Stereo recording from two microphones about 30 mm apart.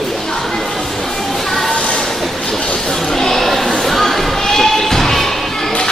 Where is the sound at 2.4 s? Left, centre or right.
Centre.